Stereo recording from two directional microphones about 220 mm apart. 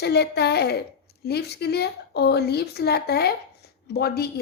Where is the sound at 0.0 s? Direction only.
50° left (ahead or behind).